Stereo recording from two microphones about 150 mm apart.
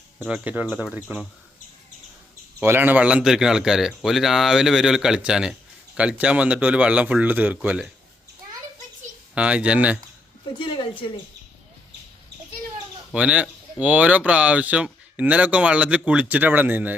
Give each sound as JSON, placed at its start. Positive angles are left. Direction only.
{"t": 0.2, "sound": "speech", "side_deg": -5}
{"t": 2.6, "sound": "a man's voice", "side_deg": -15}
{"t": 9.3, "sound": "speech", "side_deg": -10}
{"t": 10.6, "sound": "a woman's voice", "side_deg": 35}
{"t": 13.1, "sound": "speech", "side_deg": -10}